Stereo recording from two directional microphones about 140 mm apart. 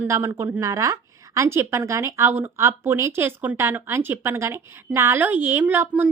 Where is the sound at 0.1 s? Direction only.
20° right (ahead or behind).